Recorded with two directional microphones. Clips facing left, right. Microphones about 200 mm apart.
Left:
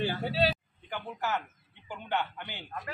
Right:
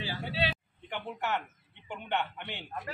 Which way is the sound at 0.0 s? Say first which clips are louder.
Left 6 dB; 55° left (ahead or behind).